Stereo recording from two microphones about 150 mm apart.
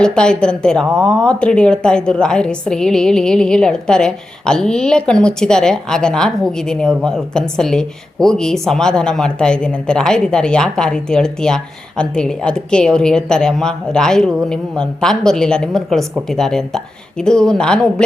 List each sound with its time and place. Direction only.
0.0 s a woman's voice: 5° left (ahead or behind)